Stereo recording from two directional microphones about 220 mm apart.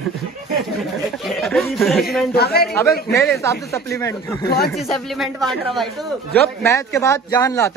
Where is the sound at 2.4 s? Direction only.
45° left (ahead or behind).